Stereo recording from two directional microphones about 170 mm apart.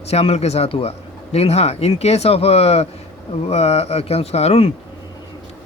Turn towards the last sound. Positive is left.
turn(degrees=40)  # may be behind; listen again after turning